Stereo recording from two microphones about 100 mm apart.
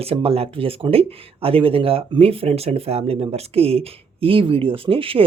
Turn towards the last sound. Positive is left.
turn(degrees=-65)  # may be behind; listen again after turning